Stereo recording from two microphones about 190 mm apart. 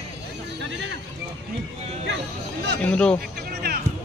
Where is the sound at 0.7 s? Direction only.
75° right (ahead or behind).